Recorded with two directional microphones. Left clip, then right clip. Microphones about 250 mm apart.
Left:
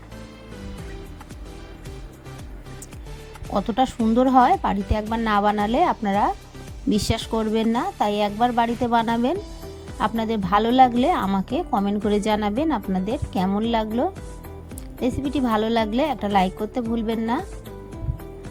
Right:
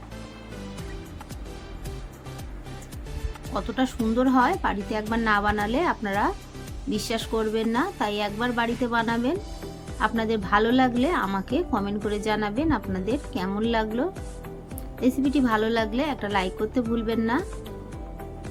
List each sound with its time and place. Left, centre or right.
3.5 s a woman's voice: left
15.3 s a woman's voice: left